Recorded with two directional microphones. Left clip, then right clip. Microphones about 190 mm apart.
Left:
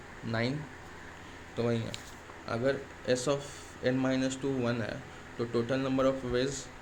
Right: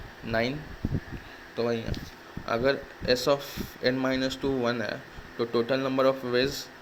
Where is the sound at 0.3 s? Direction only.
20° right (ahead or behind).